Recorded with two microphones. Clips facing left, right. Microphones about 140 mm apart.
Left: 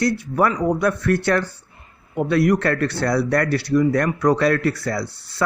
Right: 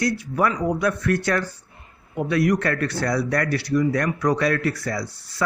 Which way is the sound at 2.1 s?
55° left (ahead or behind).